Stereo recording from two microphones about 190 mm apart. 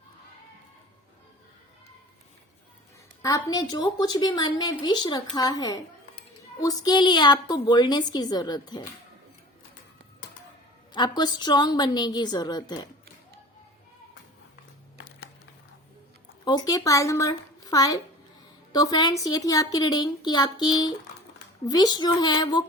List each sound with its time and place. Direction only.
3.2 s a woman's voice: 20° left (ahead or behind)
10.9 s a woman's voice: 20° left (ahead or behind)
14.9 s a sound: 60° left (ahead or behind)
16.4 s a woman's voice: 20° left (ahead or behind)